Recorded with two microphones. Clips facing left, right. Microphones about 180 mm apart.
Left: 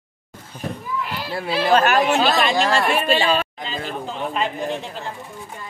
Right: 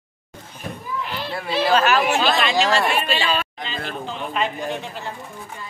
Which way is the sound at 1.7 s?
55° left (ahead or behind).